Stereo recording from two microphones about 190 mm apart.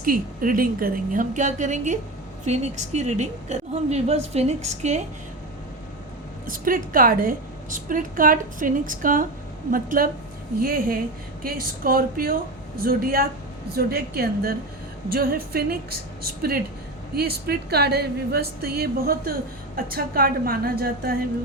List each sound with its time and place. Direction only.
0.0 s a woman's voice: 45° right (ahead or behind)
6.4 s speech: 45° right (ahead or behind)
17.2 s speech: 55° right (ahead or behind)